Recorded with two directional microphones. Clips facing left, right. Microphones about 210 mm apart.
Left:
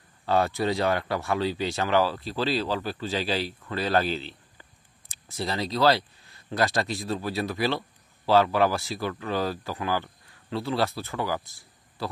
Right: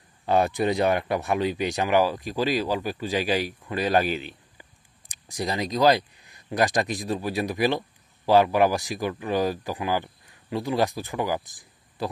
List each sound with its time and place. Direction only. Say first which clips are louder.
0.2 s speech: right 2 dB; 20° right (ahead or behind)